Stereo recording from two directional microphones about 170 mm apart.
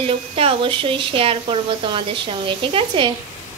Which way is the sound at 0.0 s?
35° right (ahead or behind).